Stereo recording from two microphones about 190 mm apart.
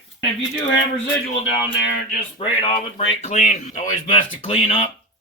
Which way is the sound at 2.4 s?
30° left (ahead or behind).